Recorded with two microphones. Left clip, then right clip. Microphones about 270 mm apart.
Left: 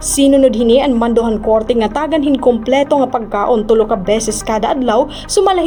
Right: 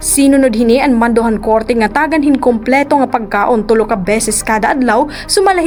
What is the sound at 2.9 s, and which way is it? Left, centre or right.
A woman's voice, right.